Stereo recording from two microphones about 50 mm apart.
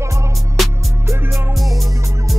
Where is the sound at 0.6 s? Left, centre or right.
Centre.